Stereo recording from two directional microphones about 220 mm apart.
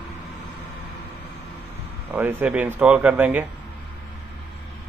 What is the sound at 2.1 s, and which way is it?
Speech, 5° right (ahead or behind).